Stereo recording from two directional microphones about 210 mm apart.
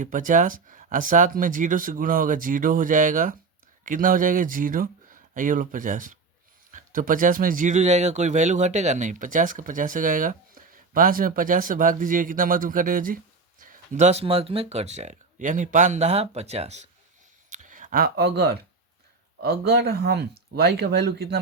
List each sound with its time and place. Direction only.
0.0 s speech: 40° right (ahead or behind)